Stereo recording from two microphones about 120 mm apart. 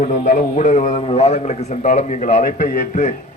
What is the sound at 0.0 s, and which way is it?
Speech, 90° left.